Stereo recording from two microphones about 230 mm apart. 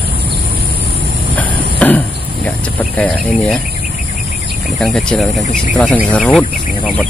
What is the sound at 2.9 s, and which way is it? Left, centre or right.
Speech, centre.